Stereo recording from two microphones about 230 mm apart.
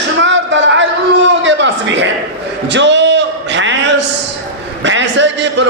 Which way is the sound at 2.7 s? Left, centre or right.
Right.